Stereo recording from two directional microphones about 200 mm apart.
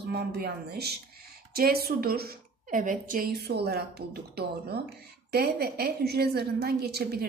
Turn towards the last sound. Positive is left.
turn(degrees=-50)  # may be behind; listen again after turning